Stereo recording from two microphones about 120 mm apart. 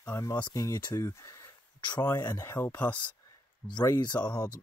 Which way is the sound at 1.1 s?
25° left (ahead or behind).